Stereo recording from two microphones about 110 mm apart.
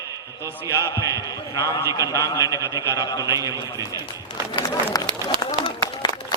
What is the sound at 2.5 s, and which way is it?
A man's voice, 30° right (ahead or behind).